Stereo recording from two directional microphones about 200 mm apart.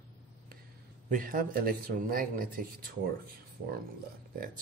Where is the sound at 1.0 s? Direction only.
45° right (ahead or behind).